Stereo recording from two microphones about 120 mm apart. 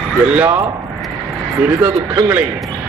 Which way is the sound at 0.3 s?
20° right (ahead or behind).